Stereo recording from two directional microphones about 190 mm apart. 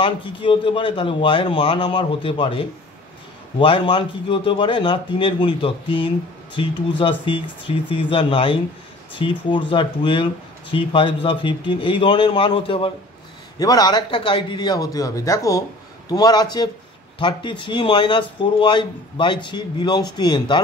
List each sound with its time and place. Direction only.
0.0 s a man's voice: 25° left (ahead or behind)